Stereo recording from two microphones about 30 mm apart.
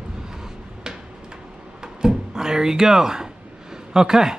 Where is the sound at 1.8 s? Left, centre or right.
Right.